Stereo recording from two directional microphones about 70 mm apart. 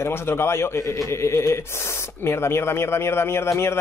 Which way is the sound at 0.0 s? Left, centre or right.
Left.